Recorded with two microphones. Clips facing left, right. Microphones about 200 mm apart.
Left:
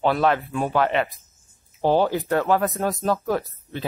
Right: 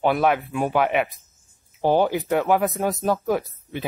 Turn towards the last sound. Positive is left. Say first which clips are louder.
# even
turn(degrees=-15)  # may be behind; listen again after turning